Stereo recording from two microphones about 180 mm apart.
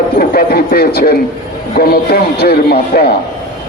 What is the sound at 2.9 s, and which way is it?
Speech, 55° left (ahead or behind).